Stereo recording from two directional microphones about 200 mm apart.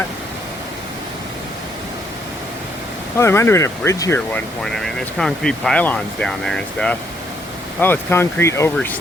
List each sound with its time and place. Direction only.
3.2 s speech: 10° left (ahead or behind)
4.6 s speech: centre (ahead or behind)